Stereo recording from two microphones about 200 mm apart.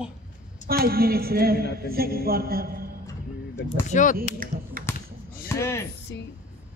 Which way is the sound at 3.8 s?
40° left (ahead or behind).